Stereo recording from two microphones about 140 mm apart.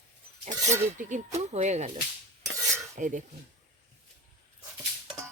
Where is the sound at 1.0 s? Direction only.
70° right (ahead or behind).